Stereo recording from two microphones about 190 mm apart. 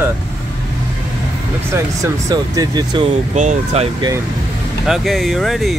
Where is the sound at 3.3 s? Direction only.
40° right (ahead or behind).